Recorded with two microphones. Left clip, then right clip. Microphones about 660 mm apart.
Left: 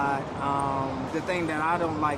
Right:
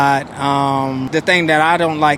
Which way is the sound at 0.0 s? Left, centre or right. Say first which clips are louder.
Right 12 dB; right.